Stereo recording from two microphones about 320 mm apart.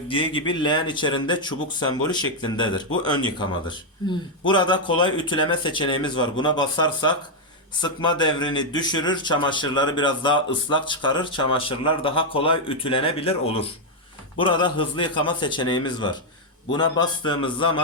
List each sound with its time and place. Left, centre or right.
0.1 s a man's voice: centre